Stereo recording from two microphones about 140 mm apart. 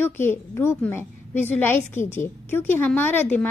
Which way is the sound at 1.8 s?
55° left (ahead or behind).